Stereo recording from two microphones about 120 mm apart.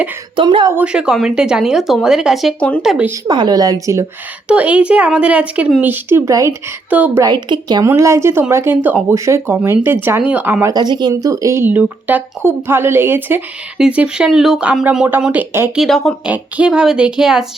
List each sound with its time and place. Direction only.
0.3 s speech: 40° right (ahead or behind)
0.7 s a woman's voice: 10° right (ahead or behind)
2.6 s speech: 10° left (ahead or behind)
3.2 s speech: 40° right (ahead or behind)
4.4 s speech: 10° right (ahead or behind); by 6.5 s 25° right (ahead or behind)
6.9 s speech: 15° right (ahead or behind)
7.2 s speech: 35° right (ahead or behind)
7.9 s speech: 25° right (ahead or behind)
10.7 s speech: 35° right (ahead or behind); by 15.7 s 15° right (ahead or behind)
15.7 s a woman's voice: centre (ahead or behind)
16.2 s speech: 10° right (ahead or behind)